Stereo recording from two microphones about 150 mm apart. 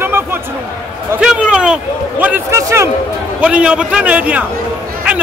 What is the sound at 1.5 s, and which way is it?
A man's voice, 5° right (ahead or behind).